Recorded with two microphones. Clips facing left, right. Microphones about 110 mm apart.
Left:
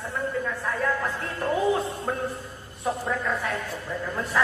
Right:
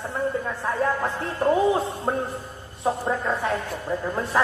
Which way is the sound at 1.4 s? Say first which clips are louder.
Right 6 dB; 25° right (ahead or behind).